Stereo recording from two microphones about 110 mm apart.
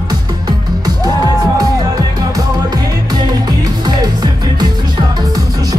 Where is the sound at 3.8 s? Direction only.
40° right (ahead or behind).